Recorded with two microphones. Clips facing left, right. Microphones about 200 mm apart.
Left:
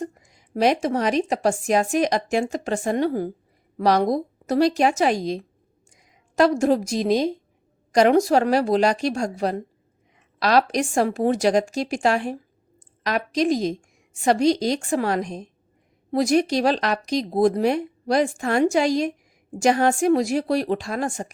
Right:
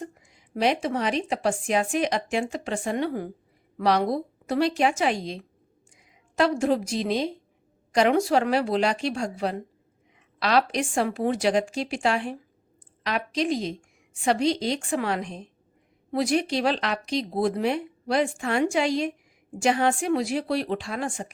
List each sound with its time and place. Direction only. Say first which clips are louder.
0.0 s a woman's voice: left 6 dB; 40° left (ahead or behind)